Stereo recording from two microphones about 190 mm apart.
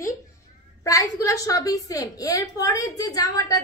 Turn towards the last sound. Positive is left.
turn(degrees=20)  # may be behind; listen again after turning